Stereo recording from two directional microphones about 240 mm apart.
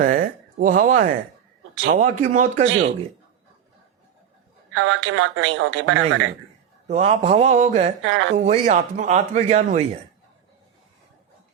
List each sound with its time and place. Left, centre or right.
0.0 s a woman's voice: right
4.7 s a woman's voice: right
6.8 s speech: right
8.0 s a woman's voice: right
8.4 s speech: right